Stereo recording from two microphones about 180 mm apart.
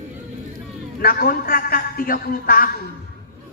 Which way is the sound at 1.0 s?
55° left (ahead or behind).